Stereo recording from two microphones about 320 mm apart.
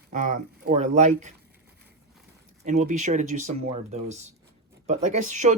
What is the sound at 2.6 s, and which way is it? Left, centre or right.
Speech, right.